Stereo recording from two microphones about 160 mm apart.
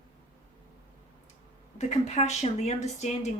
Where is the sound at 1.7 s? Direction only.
45° left (ahead or behind).